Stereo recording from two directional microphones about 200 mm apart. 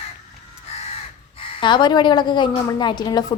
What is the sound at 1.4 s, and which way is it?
A woman's voice, 25° left (ahead or behind).